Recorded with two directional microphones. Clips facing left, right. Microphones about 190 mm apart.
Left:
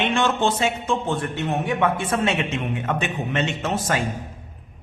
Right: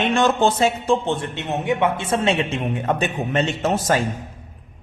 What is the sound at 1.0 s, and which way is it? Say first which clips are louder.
Speech: even; 25° right (ahead or behind).